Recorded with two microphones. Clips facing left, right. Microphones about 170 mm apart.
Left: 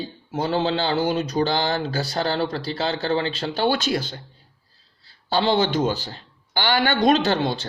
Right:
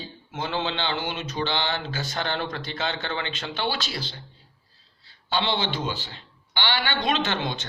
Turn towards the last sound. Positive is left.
turn(degrees=35)  # may be behind; listen again after turning